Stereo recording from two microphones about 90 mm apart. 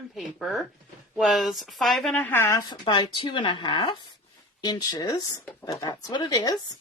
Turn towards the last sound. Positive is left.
turn(degrees=45)  # may be behind; listen again after turning